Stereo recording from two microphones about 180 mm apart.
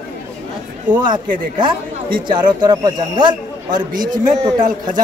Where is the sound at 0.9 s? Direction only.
10° right (ahead or behind).